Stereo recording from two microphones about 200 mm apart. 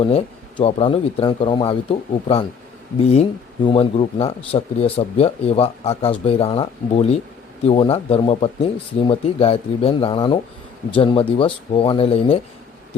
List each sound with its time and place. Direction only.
0.0 s speech: 30° left (ahead or behind)